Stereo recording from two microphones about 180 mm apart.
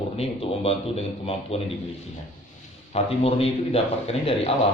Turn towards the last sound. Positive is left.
turn(degrees=35)  # may be behind; listen again after turning